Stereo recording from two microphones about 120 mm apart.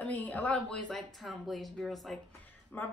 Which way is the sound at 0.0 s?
15° left (ahead or behind).